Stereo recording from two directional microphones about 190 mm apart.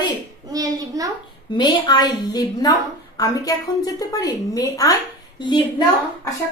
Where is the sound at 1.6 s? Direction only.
20° left (ahead or behind).